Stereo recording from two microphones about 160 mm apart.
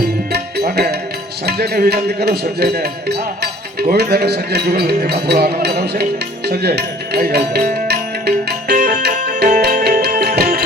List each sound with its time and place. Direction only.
0.3 s music: 85° right
1.5 s speech: 80° right
8.8 s music: 90° right
9.8 s music: 70° right (ahead or behind)